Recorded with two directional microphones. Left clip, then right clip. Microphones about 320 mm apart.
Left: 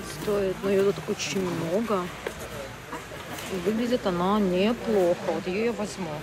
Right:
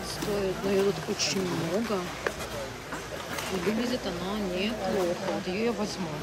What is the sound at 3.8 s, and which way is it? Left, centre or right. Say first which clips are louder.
Speech: left 6 dB; centre.